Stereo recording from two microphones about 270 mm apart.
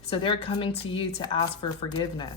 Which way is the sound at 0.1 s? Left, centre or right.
Centre.